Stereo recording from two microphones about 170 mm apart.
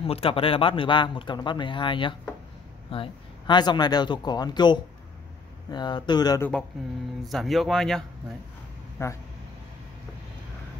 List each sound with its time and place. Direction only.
0.0 s speech: 35° left (ahead or behind)
7.2 s speech: centre (ahead or behind)
8.9 s speech: 15° left (ahead or behind)